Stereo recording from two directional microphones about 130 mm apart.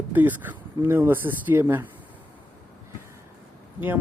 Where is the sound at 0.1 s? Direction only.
15° right (ahead or behind).